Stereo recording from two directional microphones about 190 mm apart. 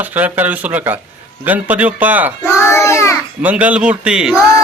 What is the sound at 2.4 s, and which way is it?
Child singing, 15° left (ahead or behind).